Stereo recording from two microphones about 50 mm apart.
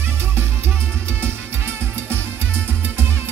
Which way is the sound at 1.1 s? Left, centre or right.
Right.